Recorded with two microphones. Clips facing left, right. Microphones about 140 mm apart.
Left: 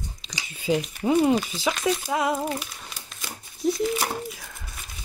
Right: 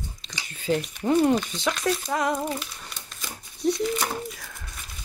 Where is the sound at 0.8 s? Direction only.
5° left (ahead or behind).